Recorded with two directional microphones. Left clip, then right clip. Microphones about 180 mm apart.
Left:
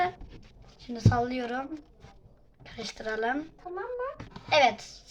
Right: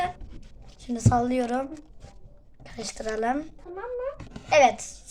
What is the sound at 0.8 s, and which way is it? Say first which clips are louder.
A woman's voice: right 4 dB; 20° right (ahead or behind).